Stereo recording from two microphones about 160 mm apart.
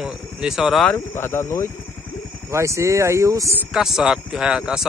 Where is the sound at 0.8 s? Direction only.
15° left (ahead or behind).